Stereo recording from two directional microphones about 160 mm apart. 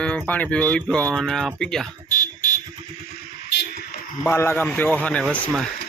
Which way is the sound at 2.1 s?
55° left (ahead or behind).